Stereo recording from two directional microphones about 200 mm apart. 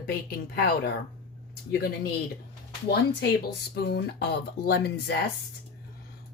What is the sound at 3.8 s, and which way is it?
Speech, 55° left (ahead or behind).